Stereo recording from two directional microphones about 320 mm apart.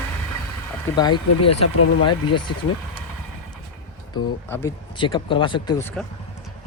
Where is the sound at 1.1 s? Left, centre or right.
Left.